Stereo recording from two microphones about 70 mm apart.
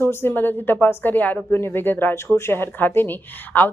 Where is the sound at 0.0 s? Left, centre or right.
Left.